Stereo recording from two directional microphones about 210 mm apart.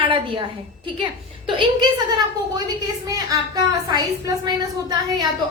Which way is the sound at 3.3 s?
15° right (ahead or behind).